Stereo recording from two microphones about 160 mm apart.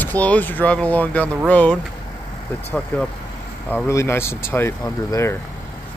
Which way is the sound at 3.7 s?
15° left (ahead or behind).